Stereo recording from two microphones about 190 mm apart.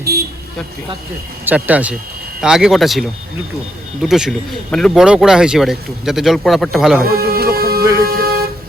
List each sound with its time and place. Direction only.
0.0 s vehicle: 55° right (ahead or behind)
1.5 s speech: 10° right (ahead or behind)
7.0 s music: 55° right (ahead or behind)
8.0 s vehicle: 55° right (ahead or behind)